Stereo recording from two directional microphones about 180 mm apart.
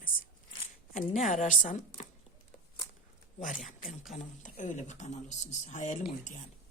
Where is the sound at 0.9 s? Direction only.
45° left (ahead or behind).